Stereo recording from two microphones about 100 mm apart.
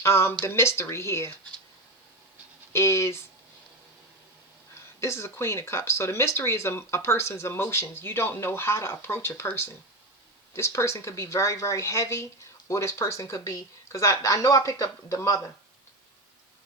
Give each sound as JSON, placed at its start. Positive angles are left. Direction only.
{"t": 0.0, "sound": "speech", "side_deg": 25}
{"t": 2.7, "sound": "speech", "side_deg": 30}
{"t": 4.7, "sound": "speech", "side_deg": 25}
{"t": 10.5, "sound": "speech", "side_deg": 25}